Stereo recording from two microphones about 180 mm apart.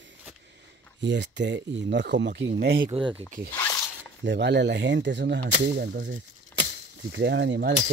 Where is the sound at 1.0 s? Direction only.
75° right (ahead or behind).